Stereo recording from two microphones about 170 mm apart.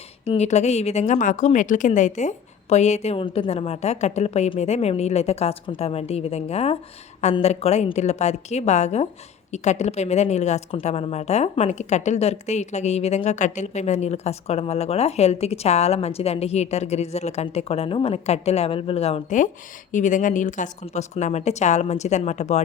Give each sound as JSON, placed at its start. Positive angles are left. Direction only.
{"t": 0.3, "sound": "a woman's voice", "side_deg": 40}